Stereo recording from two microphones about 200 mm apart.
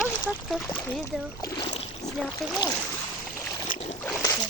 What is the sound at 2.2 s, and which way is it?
Speech, centre (ahead or behind).